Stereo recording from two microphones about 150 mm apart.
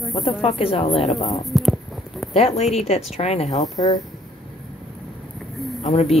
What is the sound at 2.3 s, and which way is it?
Speech, 40° left (ahead or behind).